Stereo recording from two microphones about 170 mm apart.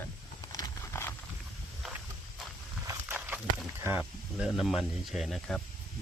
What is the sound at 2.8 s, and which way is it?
Walk, 15° right (ahead or behind).